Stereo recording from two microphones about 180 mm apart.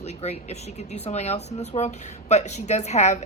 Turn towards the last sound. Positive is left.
turn(degrees=40)  # may be behind; listen again after turning